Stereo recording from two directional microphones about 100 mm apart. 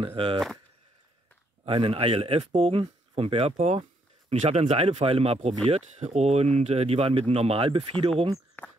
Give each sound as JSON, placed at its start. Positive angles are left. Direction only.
{"t": 0.0, "sound": "speech", "side_deg": -60}
{"t": 1.6, "sound": "speech", "side_deg": -60}
{"t": 5.7, "sound": "speech", "side_deg": -90}
{"t": 8.6, "sound": "a sound", "side_deg": 20}